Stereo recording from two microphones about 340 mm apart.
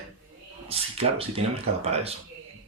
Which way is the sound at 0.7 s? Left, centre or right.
Centre.